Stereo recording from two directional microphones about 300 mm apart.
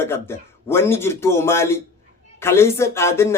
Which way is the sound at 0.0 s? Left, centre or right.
Centre.